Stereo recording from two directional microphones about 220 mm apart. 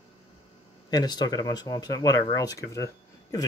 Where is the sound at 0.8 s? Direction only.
20° left (ahead or behind).